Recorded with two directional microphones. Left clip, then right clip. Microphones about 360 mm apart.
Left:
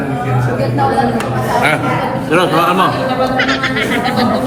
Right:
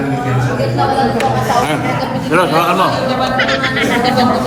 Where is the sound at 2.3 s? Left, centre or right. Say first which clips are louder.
Even; centre.